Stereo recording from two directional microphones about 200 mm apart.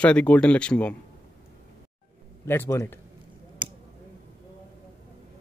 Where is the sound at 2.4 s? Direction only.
15° left (ahead or behind).